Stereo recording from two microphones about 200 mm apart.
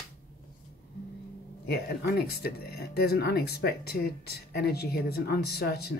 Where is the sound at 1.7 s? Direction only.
50° left (ahead or behind).